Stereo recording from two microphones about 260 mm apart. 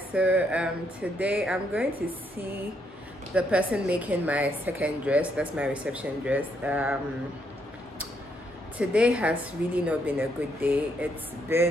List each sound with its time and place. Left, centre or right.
0.1 s a woman's voice: centre
3.3 s a woman's voice: centre
8.7 s a woman's voice: centre